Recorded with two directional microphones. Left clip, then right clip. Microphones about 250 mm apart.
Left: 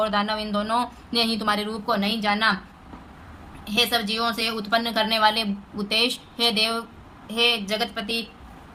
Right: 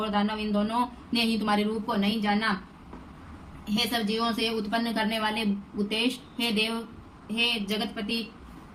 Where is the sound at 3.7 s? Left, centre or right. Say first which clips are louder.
Left 6 dB; centre.